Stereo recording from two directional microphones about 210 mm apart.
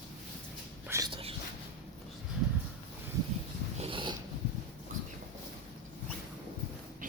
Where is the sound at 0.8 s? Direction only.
15° right (ahead or behind).